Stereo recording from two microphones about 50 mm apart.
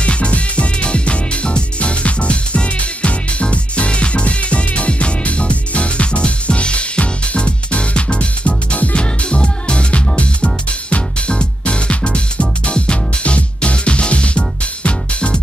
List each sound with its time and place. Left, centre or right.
0.0 s music: left